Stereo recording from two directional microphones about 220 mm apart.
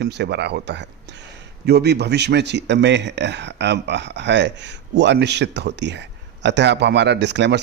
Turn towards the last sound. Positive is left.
turn(degrees=-50)  # may be behind; listen again after turning